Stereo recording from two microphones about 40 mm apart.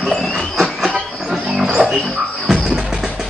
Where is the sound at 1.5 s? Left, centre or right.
Centre.